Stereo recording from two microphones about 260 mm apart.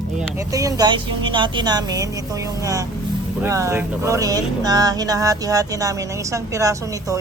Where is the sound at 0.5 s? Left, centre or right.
Centre.